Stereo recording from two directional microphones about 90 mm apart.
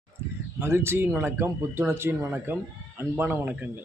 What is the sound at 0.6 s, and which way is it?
Speech, 25° right (ahead or behind).